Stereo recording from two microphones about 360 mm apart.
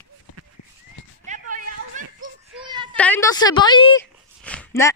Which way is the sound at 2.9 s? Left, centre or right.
Centre.